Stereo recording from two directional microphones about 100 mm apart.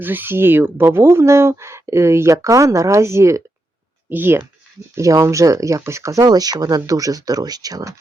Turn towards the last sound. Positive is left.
turn(degrees=-40)  # may be behind; listen again after turning